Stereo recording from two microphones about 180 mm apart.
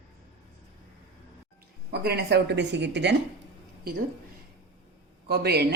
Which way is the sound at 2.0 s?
65° right (ahead or behind).